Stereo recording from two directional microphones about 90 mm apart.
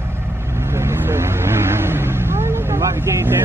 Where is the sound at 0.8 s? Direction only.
30° right (ahead or behind).